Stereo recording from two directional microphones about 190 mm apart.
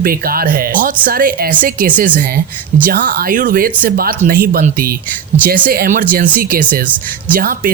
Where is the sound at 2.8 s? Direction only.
50° right (ahead or behind).